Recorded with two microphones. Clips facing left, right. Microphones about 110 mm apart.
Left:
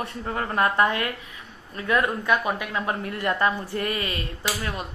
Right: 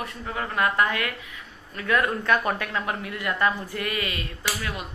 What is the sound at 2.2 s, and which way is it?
Speech, 10° left (ahead or behind).